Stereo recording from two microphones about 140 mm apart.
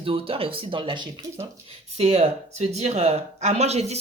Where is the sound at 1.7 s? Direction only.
50° right (ahead or behind).